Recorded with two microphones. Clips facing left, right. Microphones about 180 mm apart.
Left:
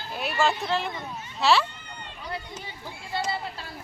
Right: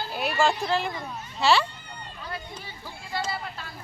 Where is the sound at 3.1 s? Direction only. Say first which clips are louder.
Left 1 dB; 25° left (ahead or behind).